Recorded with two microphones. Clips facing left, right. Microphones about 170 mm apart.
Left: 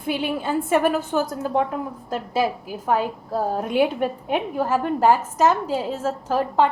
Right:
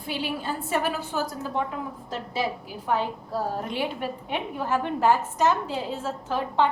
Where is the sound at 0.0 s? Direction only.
55° left (ahead or behind).